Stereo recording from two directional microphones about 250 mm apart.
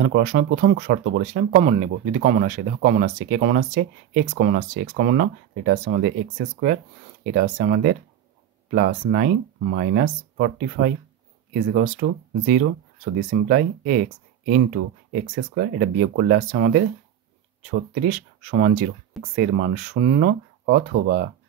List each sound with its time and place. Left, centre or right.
0.0 s speech: right